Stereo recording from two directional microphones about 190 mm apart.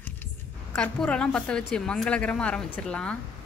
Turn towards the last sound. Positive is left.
turn(degrees=5)  # may be behind; listen again after turning